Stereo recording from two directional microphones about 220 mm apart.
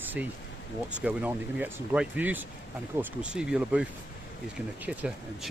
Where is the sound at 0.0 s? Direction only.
10° right (ahead or behind).